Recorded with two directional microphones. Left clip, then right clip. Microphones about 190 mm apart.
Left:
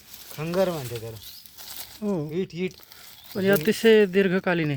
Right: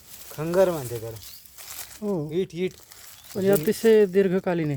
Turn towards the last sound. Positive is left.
turn(degrees=-10)  # may be behind; listen again after turning